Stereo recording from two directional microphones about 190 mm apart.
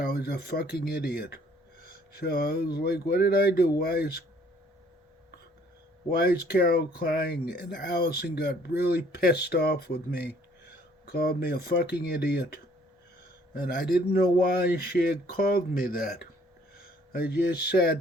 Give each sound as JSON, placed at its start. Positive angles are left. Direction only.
{"t": 0.0, "sound": "speech", "side_deg": 55}
{"t": 2.1, "sound": "speech", "side_deg": 55}
{"t": 6.1, "sound": "speech", "side_deg": 55}